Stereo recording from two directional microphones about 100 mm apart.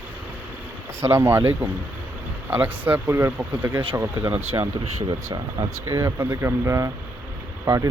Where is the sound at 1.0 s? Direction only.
25° right (ahead or behind).